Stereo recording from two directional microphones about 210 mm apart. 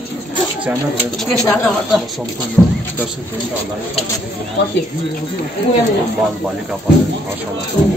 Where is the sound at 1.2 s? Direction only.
5° left (ahead or behind).